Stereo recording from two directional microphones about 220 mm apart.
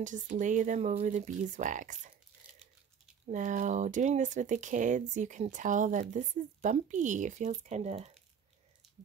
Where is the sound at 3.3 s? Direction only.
35° right (ahead or behind).